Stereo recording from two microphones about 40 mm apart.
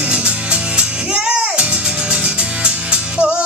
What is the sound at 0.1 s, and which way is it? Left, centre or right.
Music, right.